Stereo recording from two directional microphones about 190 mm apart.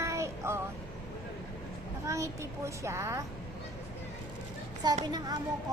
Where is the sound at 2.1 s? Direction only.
15° right (ahead or behind).